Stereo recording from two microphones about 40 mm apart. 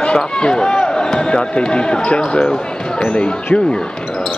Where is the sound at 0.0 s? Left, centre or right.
Left.